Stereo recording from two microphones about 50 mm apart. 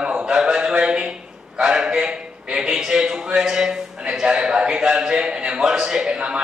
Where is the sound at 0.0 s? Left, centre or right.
Right.